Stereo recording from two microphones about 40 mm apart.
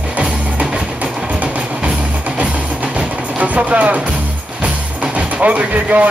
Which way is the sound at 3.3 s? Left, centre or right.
Right.